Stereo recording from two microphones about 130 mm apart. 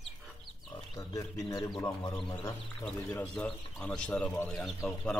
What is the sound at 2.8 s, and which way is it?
Speech, 10° left (ahead or behind).